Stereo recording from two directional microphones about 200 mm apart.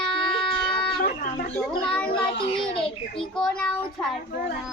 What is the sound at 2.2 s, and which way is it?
Child singing, 25° left (ahead or behind).